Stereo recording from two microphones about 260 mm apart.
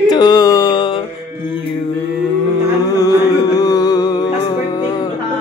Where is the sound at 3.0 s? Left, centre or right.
Centre.